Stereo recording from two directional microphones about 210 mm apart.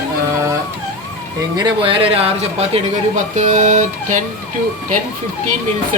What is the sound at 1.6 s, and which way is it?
Speech, 20° right (ahead or behind).